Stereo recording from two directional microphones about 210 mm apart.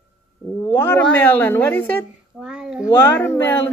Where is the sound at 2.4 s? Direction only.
5° right (ahead or behind).